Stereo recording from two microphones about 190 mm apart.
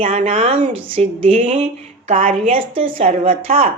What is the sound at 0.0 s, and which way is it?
Speech, 35° right (ahead or behind).